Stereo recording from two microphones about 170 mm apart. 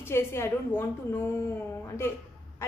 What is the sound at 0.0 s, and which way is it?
A woman's voice, 15° left (ahead or behind).